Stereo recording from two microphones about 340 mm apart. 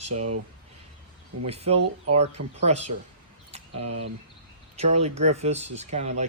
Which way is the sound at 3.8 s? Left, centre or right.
Right.